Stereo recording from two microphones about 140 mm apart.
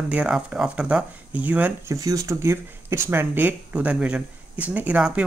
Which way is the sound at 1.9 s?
25° right (ahead or behind).